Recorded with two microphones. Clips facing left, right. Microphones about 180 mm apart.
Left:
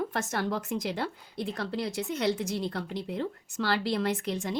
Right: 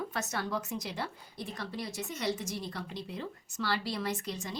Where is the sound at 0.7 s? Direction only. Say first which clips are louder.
Left 6 dB; 70° left (ahead or behind).